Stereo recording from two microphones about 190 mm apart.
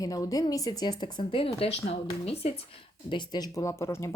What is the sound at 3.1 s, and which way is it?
Speech, 20° left (ahead or behind).